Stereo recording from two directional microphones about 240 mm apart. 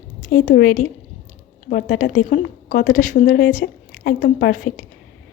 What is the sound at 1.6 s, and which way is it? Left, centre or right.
A woman's voice, left.